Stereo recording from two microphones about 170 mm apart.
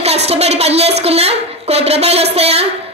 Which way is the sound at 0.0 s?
40° right (ahead or behind).